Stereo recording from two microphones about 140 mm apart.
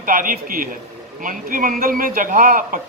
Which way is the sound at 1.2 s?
75° right (ahead or behind).